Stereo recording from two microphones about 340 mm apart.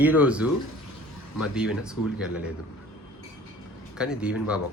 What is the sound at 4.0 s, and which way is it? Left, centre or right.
Speech, centre.